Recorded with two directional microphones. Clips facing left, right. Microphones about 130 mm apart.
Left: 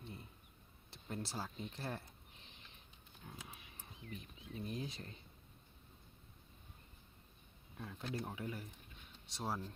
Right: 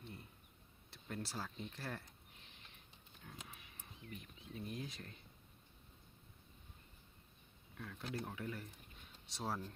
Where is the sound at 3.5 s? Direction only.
30° left (ahead or behind).